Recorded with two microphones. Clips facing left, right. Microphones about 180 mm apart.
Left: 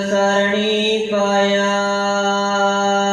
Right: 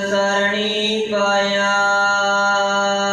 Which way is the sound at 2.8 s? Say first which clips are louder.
Left 2 dB; 20° left (ahead or behind).